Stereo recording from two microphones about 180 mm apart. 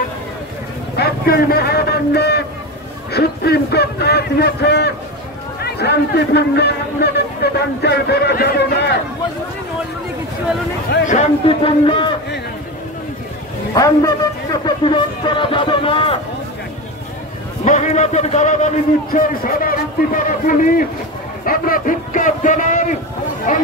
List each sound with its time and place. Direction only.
0.9 s a man's voice: 60° left (ahead or behind)
11.1 s speech: 35° left (ahead or behind)
13.7 s a man's voice: 20° left (ahead or behind)
17.6 s a man's voice: 40° left (ahead or behind)